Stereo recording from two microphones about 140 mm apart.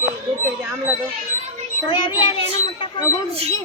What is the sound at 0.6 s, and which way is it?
Speech, 15° right (ahead or behind).